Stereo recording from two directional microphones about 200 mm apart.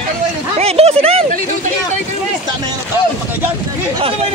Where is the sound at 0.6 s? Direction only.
30° right (ahead or behind).